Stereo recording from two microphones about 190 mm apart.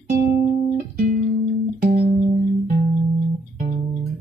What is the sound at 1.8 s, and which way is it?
Music, 50° right (ahead or behind).